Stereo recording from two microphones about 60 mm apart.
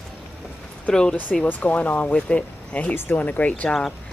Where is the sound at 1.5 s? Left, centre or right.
Left.